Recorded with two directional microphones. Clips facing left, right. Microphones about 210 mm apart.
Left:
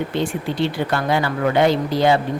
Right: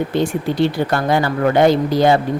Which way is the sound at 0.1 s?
45° right (ahead or behind).